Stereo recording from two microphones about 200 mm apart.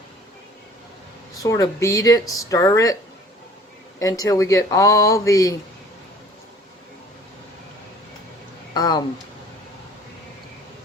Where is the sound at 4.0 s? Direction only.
15° left (ahead or behind).